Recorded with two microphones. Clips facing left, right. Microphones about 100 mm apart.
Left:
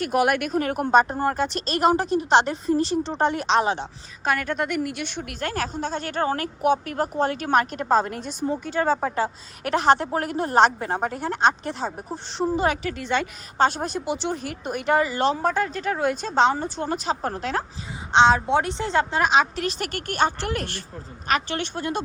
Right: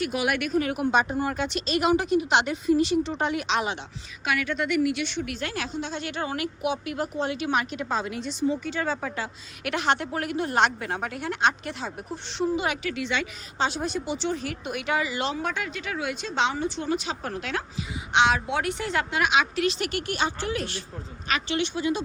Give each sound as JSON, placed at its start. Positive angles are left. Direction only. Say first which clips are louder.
{"t": 0.0, "sound": "speech", "louder": "left 5 dB", "side_deg": 45}
{"t": 1.4, "sound": "speech", "louder": "left 2 dB", "side_deg": 0}
{"t": 1.8, "sound": "a woman's voice", "louder": "left 3 dB", "side_deg": 40}
{"t": 13.8, "sound": "speech", "louder": "left 2 dB", "side_deg": 5}
{"t": 14.3, "sound": "a woman's voice", "louder": "left 1 dB", "side_deg": 40}
{"t": 20.4, "sound": "speech", "louder": "left 1 dB", "side_deg": 60}